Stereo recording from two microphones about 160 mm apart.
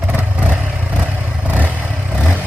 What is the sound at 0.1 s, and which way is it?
Vehicle, 10° right (ahead or behind).